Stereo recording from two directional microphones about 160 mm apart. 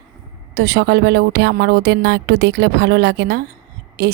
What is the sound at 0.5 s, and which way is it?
Speech, 90° right.